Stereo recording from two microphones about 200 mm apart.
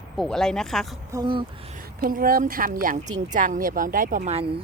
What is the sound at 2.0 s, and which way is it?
A woman's voice, 45° right (ahead or behind).